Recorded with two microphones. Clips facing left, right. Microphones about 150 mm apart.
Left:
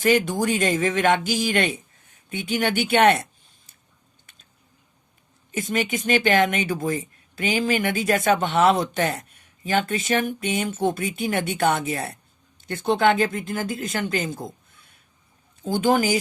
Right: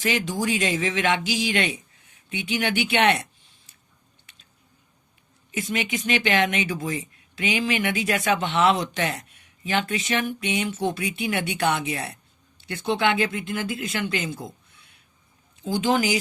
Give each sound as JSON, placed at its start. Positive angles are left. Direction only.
{"t": 0.0, "sound": "speech", "side_deg": 50}
{"t": 5.5, "sound": "speech", "side_deg": 45}